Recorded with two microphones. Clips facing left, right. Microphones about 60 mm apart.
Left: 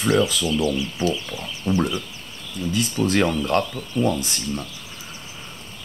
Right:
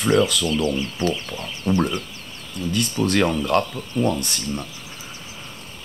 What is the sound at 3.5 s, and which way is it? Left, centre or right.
Speech, centre.